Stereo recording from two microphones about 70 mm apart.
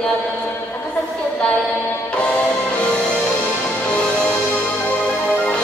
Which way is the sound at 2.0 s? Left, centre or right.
Centre.